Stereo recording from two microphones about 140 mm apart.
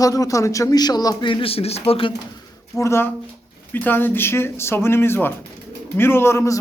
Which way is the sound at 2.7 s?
20° left (ahead or behind).